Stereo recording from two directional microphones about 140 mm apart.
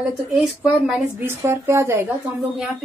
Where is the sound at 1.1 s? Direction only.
20° right (ahead or behind).